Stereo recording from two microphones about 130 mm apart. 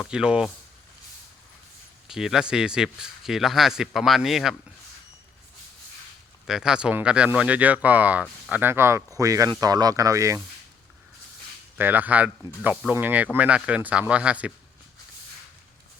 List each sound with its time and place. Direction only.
0.0 s speech: 5° right (ahead or behind)
2.0 s speech: 5° right (ahead or behind)
6.5 s speech: 5° right (ahead or behind); by 10.4 s 25° right (ahead or behind)
11.8 s speech: 15° right (ahead or behind)